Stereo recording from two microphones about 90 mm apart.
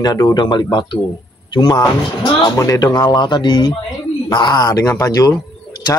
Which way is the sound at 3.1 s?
60° left (ahead or behind).